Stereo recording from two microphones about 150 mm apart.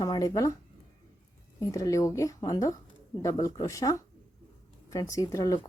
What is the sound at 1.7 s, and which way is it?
Speech, 20° left (ahead or behind).